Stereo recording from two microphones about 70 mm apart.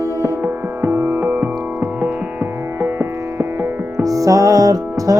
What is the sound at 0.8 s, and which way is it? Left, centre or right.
Music, right.